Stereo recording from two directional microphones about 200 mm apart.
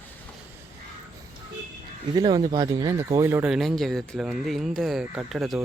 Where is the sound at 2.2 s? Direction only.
20° right (ahead or behind).